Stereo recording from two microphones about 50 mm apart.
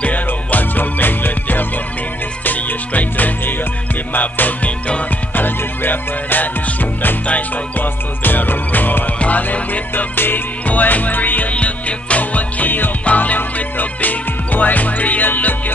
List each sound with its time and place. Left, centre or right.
0.0 s music: left
5.3 s music: left